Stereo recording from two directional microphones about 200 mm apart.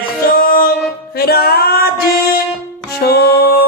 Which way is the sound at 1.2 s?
50° left (ahead or behind).